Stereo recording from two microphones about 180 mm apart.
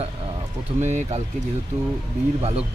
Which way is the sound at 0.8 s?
40° right (ahead or behind).